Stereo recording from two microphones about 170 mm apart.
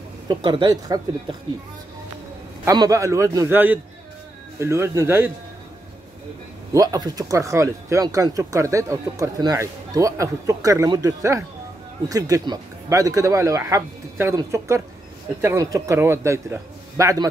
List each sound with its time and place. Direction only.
0.3 s speech: 25° right (ahead or behind)
2.6 s a man's voice: 20° right (ahead or behind)
6.7 s a man's voice: 20° right (ahead or behind)